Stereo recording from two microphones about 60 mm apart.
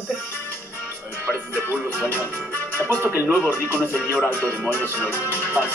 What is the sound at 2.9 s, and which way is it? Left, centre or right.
Speech, left.